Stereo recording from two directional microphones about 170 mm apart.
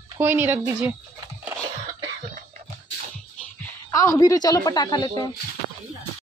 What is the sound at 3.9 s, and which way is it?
A woman's voice, 20° left (ahead or behind).